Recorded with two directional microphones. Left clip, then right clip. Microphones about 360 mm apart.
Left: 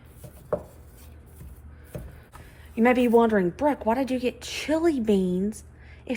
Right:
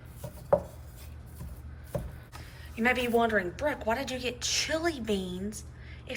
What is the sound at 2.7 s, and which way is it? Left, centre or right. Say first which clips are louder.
Speech: left 7 dB; centre.